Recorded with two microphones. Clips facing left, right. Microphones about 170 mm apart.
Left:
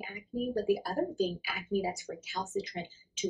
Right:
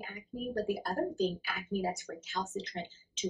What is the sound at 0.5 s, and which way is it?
Speech, 10° left (ahead or behind).